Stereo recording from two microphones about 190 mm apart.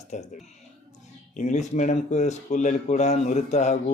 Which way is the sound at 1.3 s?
40° left (ahead or behind).